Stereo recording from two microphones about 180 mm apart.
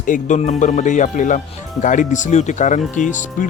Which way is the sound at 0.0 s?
45° left (ahead or behind).